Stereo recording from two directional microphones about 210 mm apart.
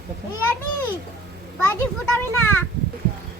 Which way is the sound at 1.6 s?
10° left (ahead or behind).